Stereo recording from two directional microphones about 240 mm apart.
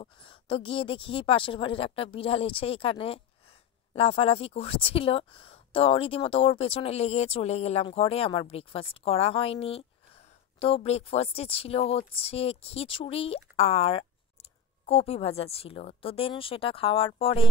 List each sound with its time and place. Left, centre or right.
0.0 s speech: left